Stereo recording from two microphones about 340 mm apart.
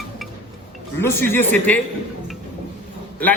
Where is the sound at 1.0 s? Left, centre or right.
Centre.